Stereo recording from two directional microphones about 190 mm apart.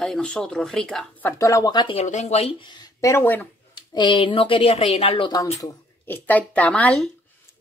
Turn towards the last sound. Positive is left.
turn(degrees=5)  # may be behind; listen again after turning